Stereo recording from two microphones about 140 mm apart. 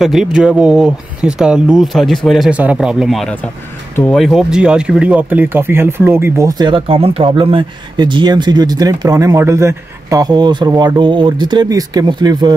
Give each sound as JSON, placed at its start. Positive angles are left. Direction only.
{"t": 0.0, "sound": "speech", "side_deg": -5}
{"t": 6.6, "sound": "speech", "side_deg": -40}